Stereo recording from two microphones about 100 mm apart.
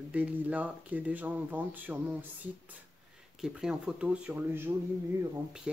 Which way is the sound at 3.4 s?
5° right (ahead or behind).